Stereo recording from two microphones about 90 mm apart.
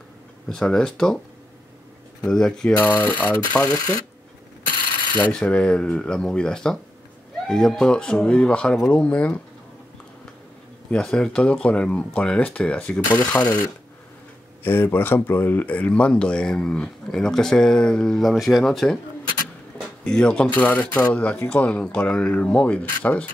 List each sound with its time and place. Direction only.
0.6 s speech: 5° left (ahead or behind)
2.2 s speech: 5° left (ahead or behind)
3.6 s speech: 45° left (ahead or behind)
5.1 s speech: 15° left (ahead or behind)
10.9 s speech: 10° left (ahead or behind)
14.6 s speech: 25° left (ahead or behind); by 18.9 s 5° left (ahead or behind)
20.0 s speech: 10° left (ahead or behind)